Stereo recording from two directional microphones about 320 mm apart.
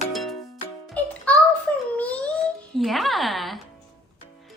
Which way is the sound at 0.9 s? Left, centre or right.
Centre.